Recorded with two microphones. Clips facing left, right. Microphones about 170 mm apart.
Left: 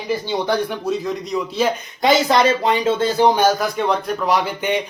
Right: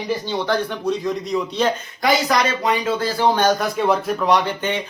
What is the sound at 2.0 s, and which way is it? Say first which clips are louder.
Speech: left 4 dB; 25° left (ahead or behind).